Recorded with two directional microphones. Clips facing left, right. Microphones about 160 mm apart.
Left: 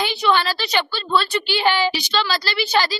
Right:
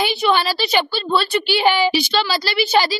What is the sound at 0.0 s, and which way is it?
A woman's voice, 10° right (ahead or behind).